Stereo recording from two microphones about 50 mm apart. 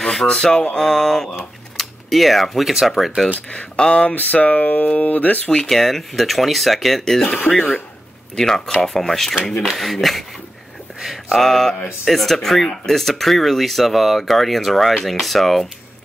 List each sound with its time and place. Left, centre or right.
0.0 s speech: centre
3.4 s speech: left
5.7 s speech: centre
8.4 s speech: centre
11.0 s a sound: centre
12.0 s speech: centre